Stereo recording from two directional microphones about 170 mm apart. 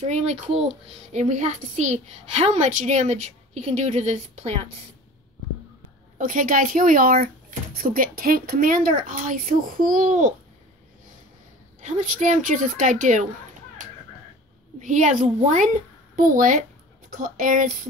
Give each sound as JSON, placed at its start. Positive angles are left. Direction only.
{"t": 0.0, "sound": "a woman's voice", "side_deg": -40}
{"t": 6.1, "sound": "a woman's voice", "side_deg": -50}
{"t": 11.8, "sound": "a woman's voice", "side_deg": -45}
{"t": 14.8, "sound": "a woman's voice", "side_deg": -45}